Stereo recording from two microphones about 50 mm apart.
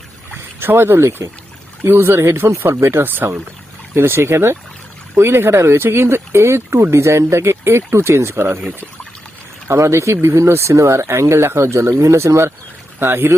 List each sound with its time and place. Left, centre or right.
0.6 s speech: right
1.8 s speech: right
8.3 s speech: right
9.6 s speech: right
13.0 s speech: right